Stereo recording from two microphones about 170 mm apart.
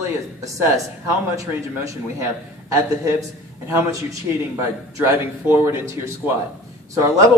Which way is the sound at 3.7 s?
20° right (ahead or behind).